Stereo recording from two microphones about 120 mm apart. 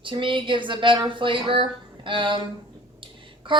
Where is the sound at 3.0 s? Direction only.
45° right (ahead or behind).